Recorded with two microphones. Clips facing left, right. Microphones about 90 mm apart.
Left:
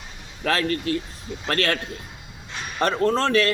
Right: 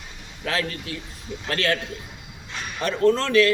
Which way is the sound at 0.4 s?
50° left (ahead or behind).